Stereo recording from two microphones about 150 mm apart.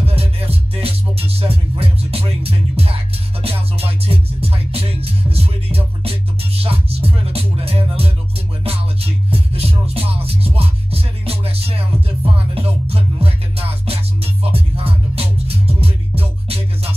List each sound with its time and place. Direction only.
0.0 s music: 40° right (ahead or behind)